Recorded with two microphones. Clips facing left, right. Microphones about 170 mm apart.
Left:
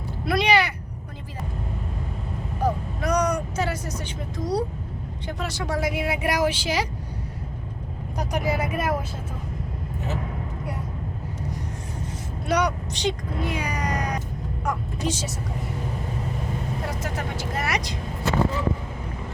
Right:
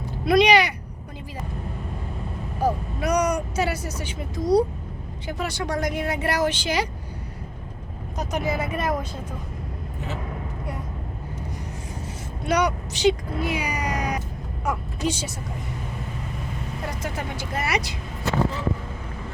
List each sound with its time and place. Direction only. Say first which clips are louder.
0.3 s a sound: right 4 dB; 20° right (ahead or behind)
2.6 s vehicle: right 1 dB; 10° right (ahead or behind)
5.4 s speech: right 1 dB; centre (ahead or behind)
8.2 s speech: even; 10° left (ahead or behind)
12.5 s speech: right 1 dB; centre (ahead or behind)
13.6 s cat: even; 10° right (ahead or behind)
14.6 s speech: right 2 dB; 5° right (ahead or behind)
17.0 s speech: even; centre (ahead or behind)